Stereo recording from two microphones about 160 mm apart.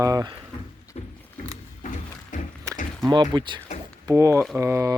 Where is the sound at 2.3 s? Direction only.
50° left (ahead or behind).